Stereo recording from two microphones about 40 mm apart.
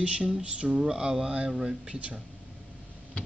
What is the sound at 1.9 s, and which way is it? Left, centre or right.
Speech, right.